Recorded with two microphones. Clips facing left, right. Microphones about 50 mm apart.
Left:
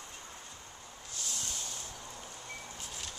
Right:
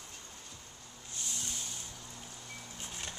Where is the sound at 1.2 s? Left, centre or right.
Right.